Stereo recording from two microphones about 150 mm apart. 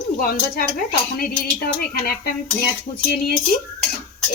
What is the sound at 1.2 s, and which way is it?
Speech, 85° left.